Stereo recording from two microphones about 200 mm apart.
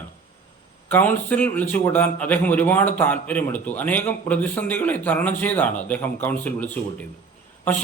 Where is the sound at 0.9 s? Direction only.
10° left (ahead or behind).